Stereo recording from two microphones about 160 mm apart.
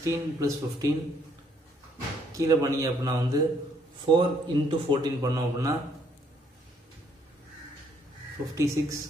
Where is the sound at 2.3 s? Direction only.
20° right (ahead or behind).